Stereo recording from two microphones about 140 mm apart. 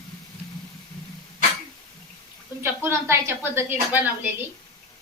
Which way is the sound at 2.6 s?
15° right (ahead or behind).